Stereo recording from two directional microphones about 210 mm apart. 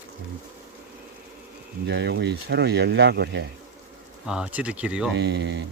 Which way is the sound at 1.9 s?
55° right (ahead or behind).